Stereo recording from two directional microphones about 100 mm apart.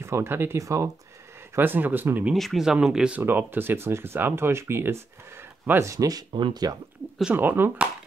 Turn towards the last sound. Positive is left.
turn(degrees=-20)  # may be behind; listen again after turning